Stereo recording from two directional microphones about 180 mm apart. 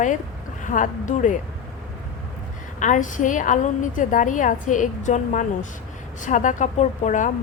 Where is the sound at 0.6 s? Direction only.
45° left (ahead or behind).